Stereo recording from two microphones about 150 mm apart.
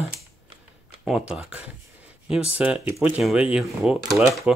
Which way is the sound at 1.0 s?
5° right (ahead or behind).